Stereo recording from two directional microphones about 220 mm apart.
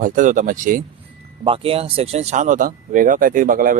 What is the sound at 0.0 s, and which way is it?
Speech, 35° right (ahead or behind).